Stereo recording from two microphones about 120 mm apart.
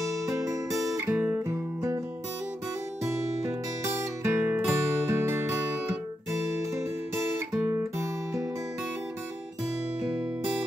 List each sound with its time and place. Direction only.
0.3 s music: 25° right (ahead or behind)
1.0 s music: 15° right (ahead or behind)
3.0 s music: 25° right (ahead or behind)
7.5 s guitar: 10° right (ahead or behind)